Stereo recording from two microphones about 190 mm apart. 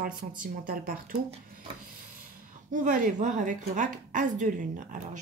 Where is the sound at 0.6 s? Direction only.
50° right (ahead or behind).